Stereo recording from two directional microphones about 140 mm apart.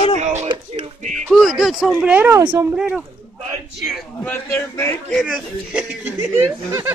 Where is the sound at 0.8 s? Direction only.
60° right (ahead or behind).